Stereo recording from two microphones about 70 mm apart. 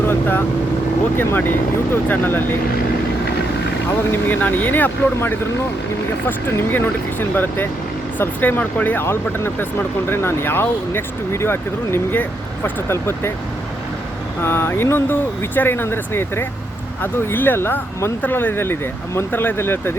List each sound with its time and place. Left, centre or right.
0.1 s speech: left
4.1 s speech: left
9.0 s speech: left
14.4 s speech: left